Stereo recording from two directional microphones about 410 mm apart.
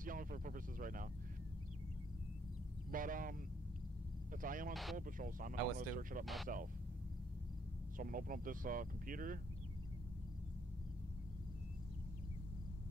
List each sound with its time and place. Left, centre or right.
0.0 s speech: centre
2.9 s speech: centre
6.2 s speech: centre
8.0 s speech: centre